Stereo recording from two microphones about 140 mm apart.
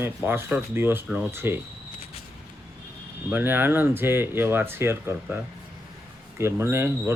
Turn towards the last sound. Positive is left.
turn(degrees=-15)  # may be behind; listen again after turning